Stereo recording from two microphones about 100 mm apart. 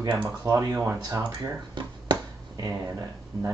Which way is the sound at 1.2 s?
50° right (ahead or behind).